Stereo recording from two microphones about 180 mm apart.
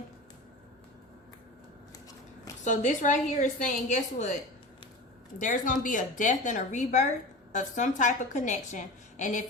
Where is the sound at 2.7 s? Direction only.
45° left (ahead or behind).